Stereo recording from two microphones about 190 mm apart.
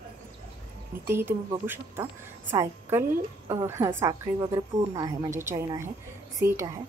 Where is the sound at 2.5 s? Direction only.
15° right (ahead or behind).